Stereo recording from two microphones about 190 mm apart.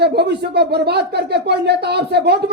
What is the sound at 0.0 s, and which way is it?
Speech, 60° right (ahead or behind).